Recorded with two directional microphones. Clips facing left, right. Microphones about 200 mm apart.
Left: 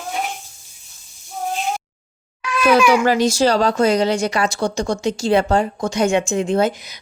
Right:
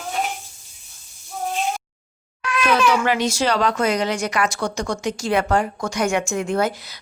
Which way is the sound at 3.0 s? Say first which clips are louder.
Left 5 dB; 35° left (ahead or behind).